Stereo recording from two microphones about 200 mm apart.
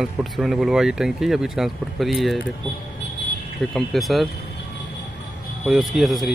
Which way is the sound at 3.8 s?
Centre (ahead or behind).